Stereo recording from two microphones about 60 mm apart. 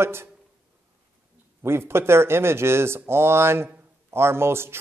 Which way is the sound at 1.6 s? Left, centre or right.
Right.